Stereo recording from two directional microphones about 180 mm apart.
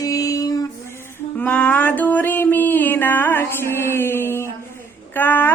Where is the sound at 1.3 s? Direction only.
10° left (ahead or behind).